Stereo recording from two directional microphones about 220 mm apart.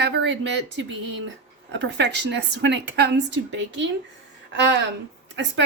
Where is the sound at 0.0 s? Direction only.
50° right (ahead or behind).